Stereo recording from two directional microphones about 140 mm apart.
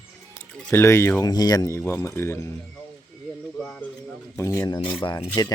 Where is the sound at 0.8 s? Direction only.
20° left (ahead or behind).